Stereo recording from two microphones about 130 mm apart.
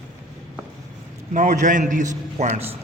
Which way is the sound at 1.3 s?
75° right (ahead or behind).